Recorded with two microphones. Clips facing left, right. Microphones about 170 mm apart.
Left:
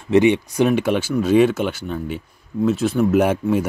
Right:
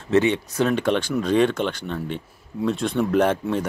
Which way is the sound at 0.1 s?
15° left (ahead or behind).